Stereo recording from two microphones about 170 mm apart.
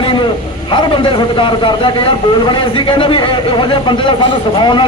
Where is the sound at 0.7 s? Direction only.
30° left (ahead or behind).